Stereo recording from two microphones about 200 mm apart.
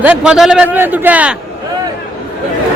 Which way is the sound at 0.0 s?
5° right (ahead or behind).